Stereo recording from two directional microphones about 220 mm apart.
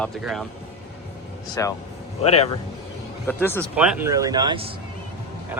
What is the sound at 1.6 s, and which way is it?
Speech, 15° left (ahead or behind).